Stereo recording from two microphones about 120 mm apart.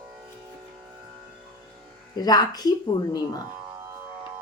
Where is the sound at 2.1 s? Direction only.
35° left (ahead or behind).